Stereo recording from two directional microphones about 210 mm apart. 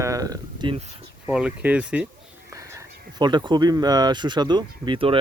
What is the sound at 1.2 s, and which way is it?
Speech, 5° right (ahead or behind).